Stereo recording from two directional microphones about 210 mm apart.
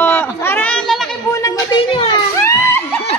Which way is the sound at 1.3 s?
20° left (ahead or behind).